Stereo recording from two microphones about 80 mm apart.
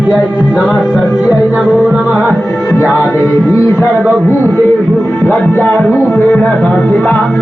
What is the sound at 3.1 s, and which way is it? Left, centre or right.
Speech, left.